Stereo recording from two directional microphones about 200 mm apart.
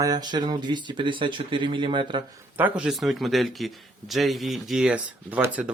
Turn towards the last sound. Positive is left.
turn(degrees=-5)  # may be behind; listen again after turning